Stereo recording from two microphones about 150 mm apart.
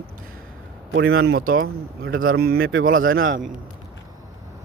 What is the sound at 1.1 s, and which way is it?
Speech, 90° right.